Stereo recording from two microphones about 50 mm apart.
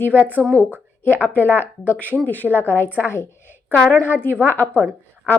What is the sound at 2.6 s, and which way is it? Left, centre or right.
A woman's voice, left.